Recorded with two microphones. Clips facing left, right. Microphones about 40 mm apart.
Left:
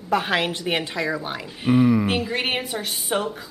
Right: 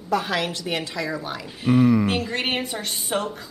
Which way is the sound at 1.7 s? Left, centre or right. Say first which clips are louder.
Even; centre.